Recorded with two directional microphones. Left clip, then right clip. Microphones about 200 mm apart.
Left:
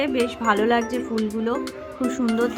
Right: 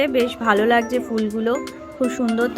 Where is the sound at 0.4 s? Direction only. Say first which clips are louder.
Right 3 dB; 15° right (ahead or behind).